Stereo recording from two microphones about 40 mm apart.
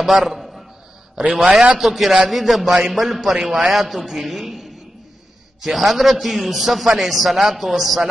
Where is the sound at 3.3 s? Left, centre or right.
Centre.